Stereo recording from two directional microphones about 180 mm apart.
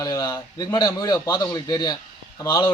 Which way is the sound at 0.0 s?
20° left (ahead or behind).